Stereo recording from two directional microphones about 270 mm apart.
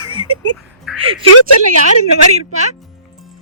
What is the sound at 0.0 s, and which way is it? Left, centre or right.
Music, right.